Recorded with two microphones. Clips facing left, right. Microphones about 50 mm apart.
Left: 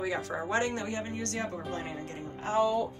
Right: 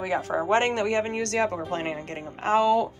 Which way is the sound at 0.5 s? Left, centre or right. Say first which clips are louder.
Right 8 dB; right.